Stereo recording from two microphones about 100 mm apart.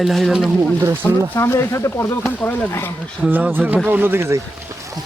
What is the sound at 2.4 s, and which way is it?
Speech, 20° left (ahead or behind).